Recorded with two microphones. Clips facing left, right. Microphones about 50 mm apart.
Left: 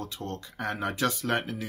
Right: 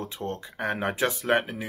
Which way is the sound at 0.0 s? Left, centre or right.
Right.